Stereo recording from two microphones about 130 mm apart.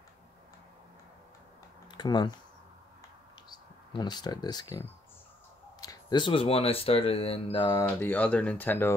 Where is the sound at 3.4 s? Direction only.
35° left (ahead or behind).